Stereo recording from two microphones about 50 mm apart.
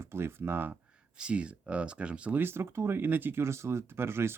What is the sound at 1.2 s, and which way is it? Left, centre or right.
Speech, right.